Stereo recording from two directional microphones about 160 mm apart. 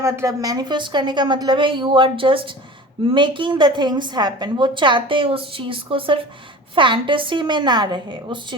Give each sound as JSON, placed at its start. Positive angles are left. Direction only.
{"t": 0.0, "sound": "a woman's voice", "side_deg": -20}